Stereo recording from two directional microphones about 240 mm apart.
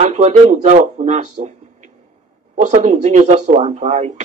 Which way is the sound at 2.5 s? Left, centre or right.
Right.